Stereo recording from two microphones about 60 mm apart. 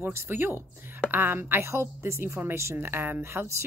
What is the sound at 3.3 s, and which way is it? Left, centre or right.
Speech, right.